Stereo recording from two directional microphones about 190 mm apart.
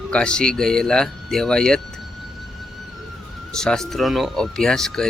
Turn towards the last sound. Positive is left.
turn(degrees=5)  # may be behind; listen again after turning